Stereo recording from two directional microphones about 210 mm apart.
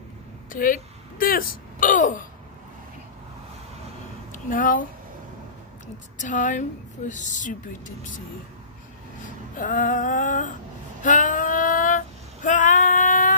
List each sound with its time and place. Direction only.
0.5 s speech: 40° left (ahead or behind)
4.3 s speech: 40° left (ahead or behind)
6.1 s speech: 35° left (ahead or behind)
9.2 s a sound: 40° left (ahead or behind)
11.0 s female singing: 40° left (ahead or behind)